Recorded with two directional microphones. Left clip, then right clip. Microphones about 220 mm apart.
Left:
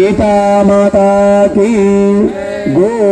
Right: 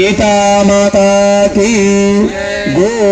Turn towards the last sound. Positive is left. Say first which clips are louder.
# even
turn(degrees=35)  # may be behind; listen again after turning